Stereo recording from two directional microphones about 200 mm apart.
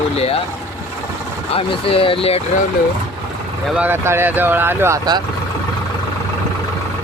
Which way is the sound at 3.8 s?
10° right (ahead or behind).